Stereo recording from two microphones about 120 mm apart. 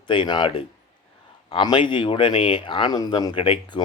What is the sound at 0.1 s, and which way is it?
Speech, 40° left (ahead or behind).